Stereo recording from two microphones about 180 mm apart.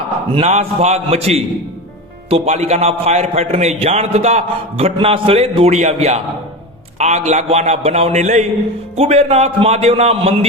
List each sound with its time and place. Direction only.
0.3 s a man's voice: 35° right (ahead or behind)